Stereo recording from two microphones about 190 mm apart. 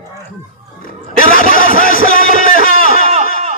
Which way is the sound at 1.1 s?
50° left (ahead or behind).